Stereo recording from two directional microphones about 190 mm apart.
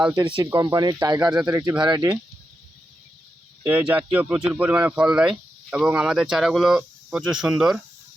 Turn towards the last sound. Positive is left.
turn(degrees=-5)  # may be behind; listen again after turning